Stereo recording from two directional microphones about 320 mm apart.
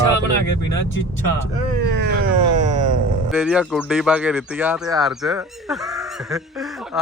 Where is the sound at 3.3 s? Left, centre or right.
Centre.